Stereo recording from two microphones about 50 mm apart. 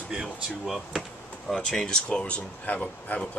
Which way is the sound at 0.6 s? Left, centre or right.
Centre.